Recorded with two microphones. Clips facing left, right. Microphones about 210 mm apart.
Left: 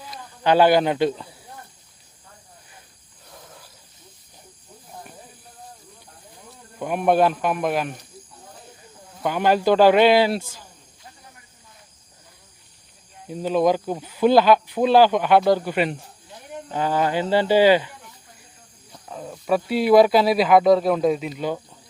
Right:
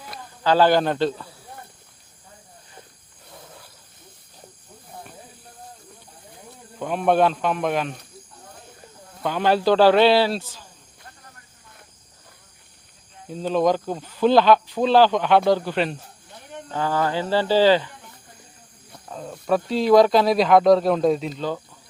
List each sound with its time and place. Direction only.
0.4 s speech: 15° left (ahead or behind)
6.7 s speech: 10° left (ahead or behind)
9.2 s speech: 10° left (ahead or behind)
13.2 s speech: 10° left (ahead or behind)
19.0 s speech: 5° left (ahead or behind)